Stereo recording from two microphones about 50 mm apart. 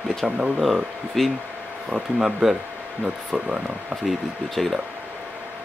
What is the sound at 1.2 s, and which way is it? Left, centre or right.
Speech, centre.